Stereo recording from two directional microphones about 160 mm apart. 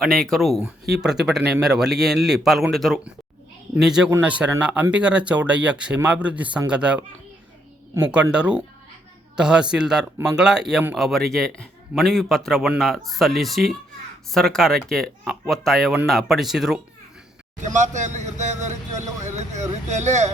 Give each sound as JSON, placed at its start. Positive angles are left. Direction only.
{"t": 0.0, "sound": "a man's voice", "side_deg": 0}
{"t": 8.1, "sound": "a man's voice", "side_deg": -5}
{"t": 17.6, "sound": "a sound", "side_deg": -50}
{"t": 19.9, "sound": "speech", "side_deg": -45}